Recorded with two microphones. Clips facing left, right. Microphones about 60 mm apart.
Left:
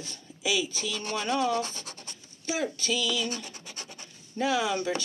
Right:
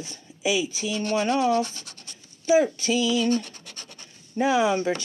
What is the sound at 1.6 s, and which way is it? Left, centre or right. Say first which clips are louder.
Scratch: right 5 dB; left.